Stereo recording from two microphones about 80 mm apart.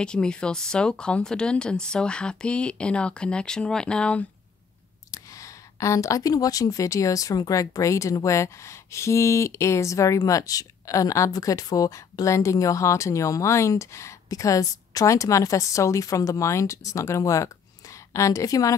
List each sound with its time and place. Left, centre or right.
0.0 s speech: centre
5.1 s speech: left